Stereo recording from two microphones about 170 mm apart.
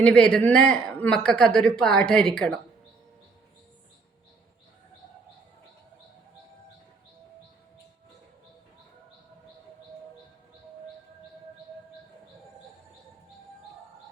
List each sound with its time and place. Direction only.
0.0 s speech: 5° left (ahead or behind)